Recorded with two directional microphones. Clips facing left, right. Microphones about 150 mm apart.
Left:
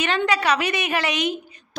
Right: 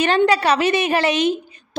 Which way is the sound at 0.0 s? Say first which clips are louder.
Right 6 dB; 35° right (ahead or behind).